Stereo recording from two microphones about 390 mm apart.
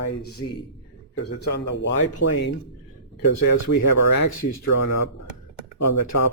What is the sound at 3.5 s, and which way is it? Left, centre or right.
Speech, left.